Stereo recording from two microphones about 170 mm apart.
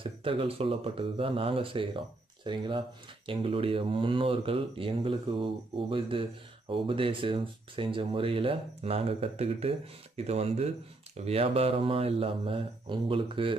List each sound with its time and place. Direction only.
0.0 s speech: 30° right (ahead or behind)